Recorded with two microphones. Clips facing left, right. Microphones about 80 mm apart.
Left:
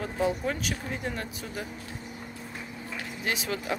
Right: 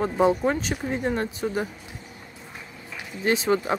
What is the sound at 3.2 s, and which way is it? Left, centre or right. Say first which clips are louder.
Speech: right 10 dB; right.